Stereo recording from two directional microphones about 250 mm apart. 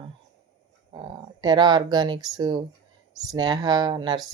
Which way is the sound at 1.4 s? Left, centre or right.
Centre.